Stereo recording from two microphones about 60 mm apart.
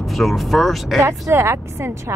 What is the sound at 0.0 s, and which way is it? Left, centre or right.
Speech, centre.